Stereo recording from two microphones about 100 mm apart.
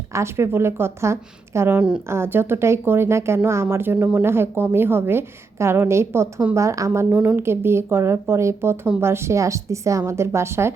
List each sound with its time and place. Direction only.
0.1 s a woman's voice: 30° right (ahead or behind)